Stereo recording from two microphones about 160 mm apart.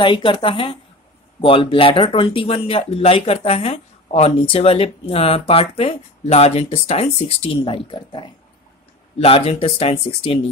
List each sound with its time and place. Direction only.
0.0 s speech: 30° left (ahead or behind)